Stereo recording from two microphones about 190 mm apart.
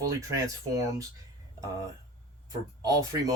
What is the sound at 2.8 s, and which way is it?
Speech, 15° right (ahead or behind).